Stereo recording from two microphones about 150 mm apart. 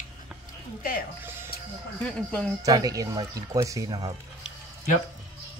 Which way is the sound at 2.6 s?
25° right (ahead or behind).